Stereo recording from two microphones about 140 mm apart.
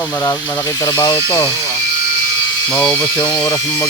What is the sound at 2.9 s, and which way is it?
Speech, 15° left (ahead or behind).